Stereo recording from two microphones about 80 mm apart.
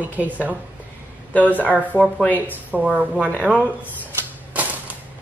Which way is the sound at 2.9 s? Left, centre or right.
Centre.